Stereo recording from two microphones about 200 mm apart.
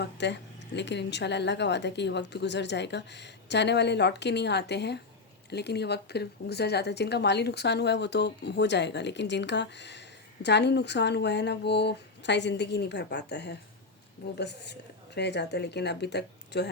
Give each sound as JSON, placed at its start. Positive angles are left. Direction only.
{"t": 0.0, "sound": "a woman's voice", "side_deg": 60}